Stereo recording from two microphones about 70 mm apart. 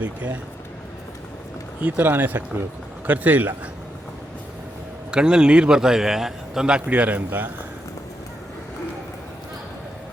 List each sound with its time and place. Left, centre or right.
0.0 s speech: right
1.8 s speech: right
5.1 s a man's voice: centre
7.3 s speech: right